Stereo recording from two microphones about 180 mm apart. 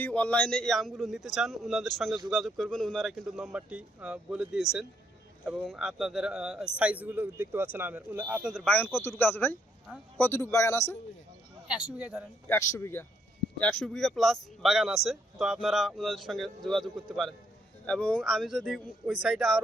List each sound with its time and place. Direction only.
0.0 s speech: 5° left (ahead or behind)
11.7 s speech: 5° right (ahead or behind)
12.5 s speech: 15° left (ahead or behind); by 19.6 s centre (ahead or behind)